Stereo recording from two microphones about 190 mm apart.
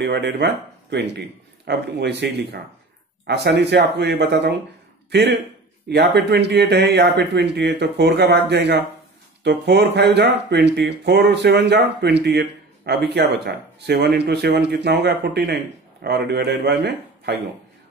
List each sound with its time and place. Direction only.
0.0 s speech: 60° right (ahead or behind)
5.9 s speech: 60° right (ahead or behind)